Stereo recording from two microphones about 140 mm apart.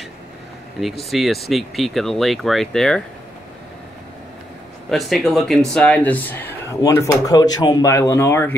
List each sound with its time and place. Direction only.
0.7 s speech: centre (ahead or behind)
4.9 s speech: centre (ahead or behind); by 8.5 s 15° left (ahead or behind)